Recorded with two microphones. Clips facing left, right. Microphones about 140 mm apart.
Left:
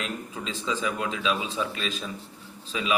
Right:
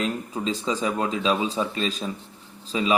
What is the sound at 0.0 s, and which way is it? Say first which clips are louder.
Speech: right 7 dB; 35° right (ahead or behind).